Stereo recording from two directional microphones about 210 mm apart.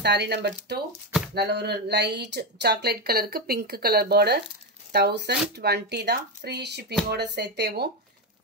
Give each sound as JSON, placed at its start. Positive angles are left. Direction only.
{"t": 0.0, "sound": "speech", "side_deg": -50}